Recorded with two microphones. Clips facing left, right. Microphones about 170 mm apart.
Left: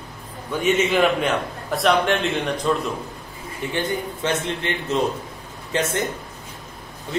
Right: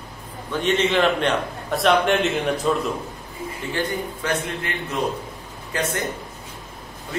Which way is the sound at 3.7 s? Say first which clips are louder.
Left 1 dB; 25° left (ahead or behind).